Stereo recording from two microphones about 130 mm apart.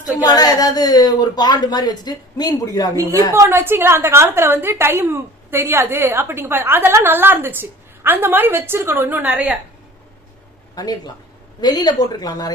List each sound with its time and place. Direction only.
0.2 s a woman's voice: 30° left (ahead or behind)
3.3 s a woman's voice: 20° right (ahead or behind)
10.8 s speech: 30° left (ahead or behind)